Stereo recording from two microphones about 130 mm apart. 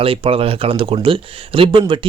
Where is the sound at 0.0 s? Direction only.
45° right (ahead or behind).